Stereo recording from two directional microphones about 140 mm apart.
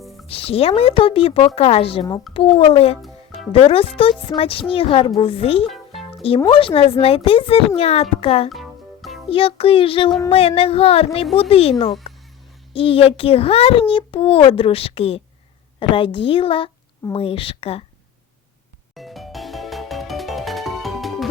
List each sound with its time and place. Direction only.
0.3 s speech: 45° left (ahead or behind)
3.0 s music: centre (ahead or behind)
3.5 s a child's voice: 40° left (ahead or behind)
5.6 s music: centre (ahead or behind)
6.5 s a child's voice: 40° left (ahead or behind)
8.4 s music: centre (ahead or behind)
9.3 s a child's voice: 40° left (ahead or behind)
12.7 s a child's voice: 40° left (ahead or behind)
18.9 s music: centre (ahead or behind)